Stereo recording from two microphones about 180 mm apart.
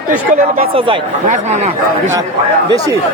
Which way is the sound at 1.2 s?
40° right (ahead or behind).